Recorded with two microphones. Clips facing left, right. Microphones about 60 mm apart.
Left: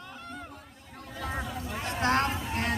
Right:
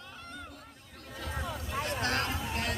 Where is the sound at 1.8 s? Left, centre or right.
Left.